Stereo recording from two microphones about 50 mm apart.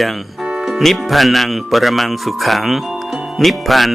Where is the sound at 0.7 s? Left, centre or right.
Centre.